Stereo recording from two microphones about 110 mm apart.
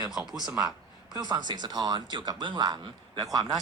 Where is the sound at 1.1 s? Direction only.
40° right (ahead or behind).